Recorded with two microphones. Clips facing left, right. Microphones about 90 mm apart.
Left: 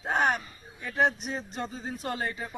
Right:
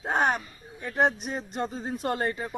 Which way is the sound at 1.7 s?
45° right (ahead or behind).